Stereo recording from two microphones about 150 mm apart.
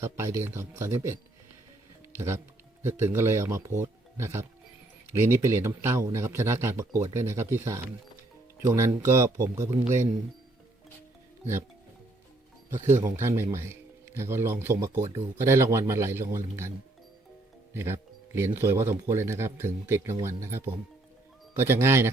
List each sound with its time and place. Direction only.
0.0 s a man's voice: 20° right (ahead or behind)
2.1 s a man's voice: 20° right (ahead or behind)
13.0 s a man's voice: 15° right (ahead or behind)
17.7 s a man's voice: 15° right (ahead or behind)